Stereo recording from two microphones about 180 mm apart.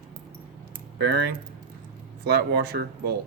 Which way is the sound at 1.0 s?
60° right (ahead or behind).